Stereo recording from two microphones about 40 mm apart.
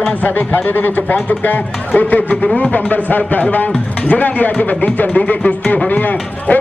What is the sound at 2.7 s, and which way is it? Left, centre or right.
A man's voice, left.